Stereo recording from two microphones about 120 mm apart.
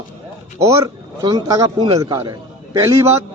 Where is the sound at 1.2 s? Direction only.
30° right (ahead or behind).